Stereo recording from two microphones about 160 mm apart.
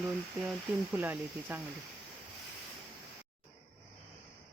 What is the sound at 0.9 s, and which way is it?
Speech, 10° right (ahead or behind).